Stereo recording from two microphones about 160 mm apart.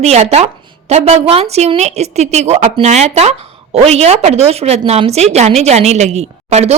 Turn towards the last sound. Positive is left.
turn(degrees=-45)  # may be behind; listen again after turning